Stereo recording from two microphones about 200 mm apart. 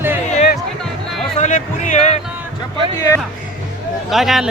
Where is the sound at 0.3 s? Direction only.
35° left (ahead or behind).